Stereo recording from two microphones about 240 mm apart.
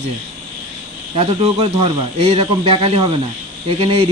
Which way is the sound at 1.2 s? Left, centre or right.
Right.